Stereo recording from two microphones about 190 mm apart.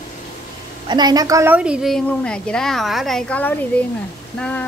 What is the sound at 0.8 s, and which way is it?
A woman's voice, 20° right (ahead or behind).